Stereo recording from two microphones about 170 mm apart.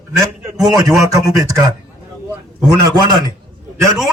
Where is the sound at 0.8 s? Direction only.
20° right (ahead or behind).